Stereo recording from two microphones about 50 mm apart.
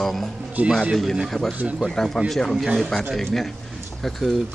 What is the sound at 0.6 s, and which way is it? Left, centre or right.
Speech, right.